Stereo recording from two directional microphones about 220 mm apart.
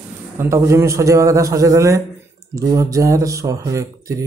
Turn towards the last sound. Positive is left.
turn(degrees=-15)  # may be behind; listen again after turning